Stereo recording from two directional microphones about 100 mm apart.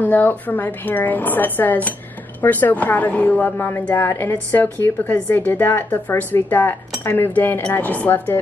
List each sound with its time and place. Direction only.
0.0 s a woman's voice: 15° left (ahead or behind)